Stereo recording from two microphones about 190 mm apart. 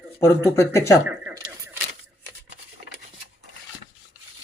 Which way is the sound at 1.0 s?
10° right (ahead or behind).